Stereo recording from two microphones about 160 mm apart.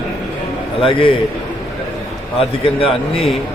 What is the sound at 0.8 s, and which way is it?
Speech, 35° left (ahead or behind).